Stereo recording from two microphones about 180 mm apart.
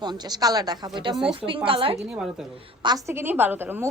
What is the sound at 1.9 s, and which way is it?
Speech, 5° right (ahead or behind).